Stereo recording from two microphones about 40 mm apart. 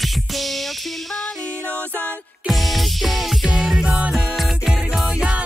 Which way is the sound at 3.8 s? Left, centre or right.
Right.